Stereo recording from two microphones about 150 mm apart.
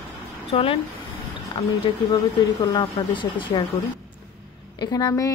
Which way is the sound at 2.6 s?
30° left (ahead or behind).